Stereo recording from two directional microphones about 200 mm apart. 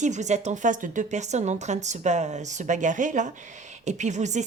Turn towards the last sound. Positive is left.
turn(degrees=-35)  # may be behind; listen again after turning